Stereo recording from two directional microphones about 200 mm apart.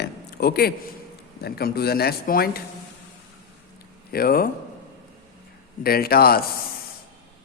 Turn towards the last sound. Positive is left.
turn(degrees=50)  # may be behind; listen again after turning